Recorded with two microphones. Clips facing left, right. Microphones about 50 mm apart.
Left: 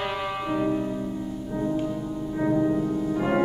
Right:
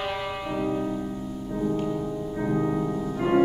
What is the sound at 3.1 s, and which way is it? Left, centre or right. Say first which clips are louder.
Music: right 4 dB; centre.